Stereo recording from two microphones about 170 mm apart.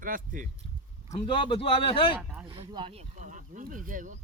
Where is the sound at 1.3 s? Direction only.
30° left (ahead or behind).